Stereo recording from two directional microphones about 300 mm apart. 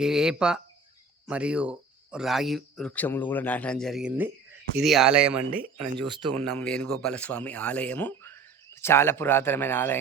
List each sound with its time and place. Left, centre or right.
0.0 s speech: centre
5.4 s speech: right
6.6 s speech: centre